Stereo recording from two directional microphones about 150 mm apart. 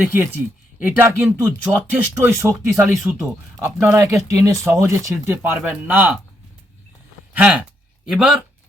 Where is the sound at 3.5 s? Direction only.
20° right (ahead or behind).